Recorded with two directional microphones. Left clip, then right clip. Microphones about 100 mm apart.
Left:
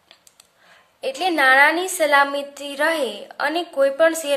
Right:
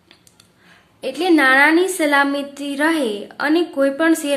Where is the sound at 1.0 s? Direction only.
35° left (ahead or behind).